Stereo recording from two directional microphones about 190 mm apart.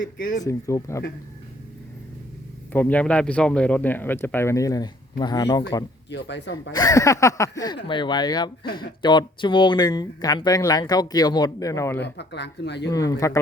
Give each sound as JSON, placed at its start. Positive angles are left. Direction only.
{"t": 0.0, "sound": "speech", "side_deg": 45}
{"t": 0.4, "sound": "speech", "side_deg": 15}
{"t": 2.7, "sound": "speech", "side_deg": 5}
{"t": 6.1, "sound": "speech", "side_deg": 65}
{"t": 6.5, "sound": "speech", "side_deg": 20}
{"t": 12.0, "sound": "speech", "side_deg": 65}
{"t": 12.9, "sound": "speech", "side_deg": 20}